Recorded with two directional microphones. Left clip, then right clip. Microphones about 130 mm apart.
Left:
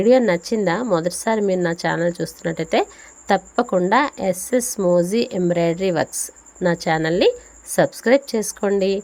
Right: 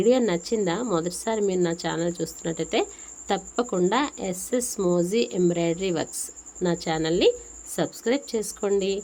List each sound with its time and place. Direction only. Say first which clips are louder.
0.0 s speech: left 6 dB; 35° left (ahead or behind)